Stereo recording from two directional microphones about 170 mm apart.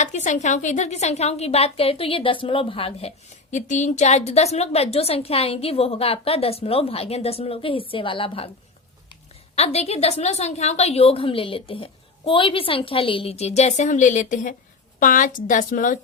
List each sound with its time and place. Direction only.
0.0 s a woman's voice: 45° left (ahead or behind)
3.5 s a woman's voice: 45° left (ahead or behind)
9.6 s a woman's voice: 40° left (ahead or behind)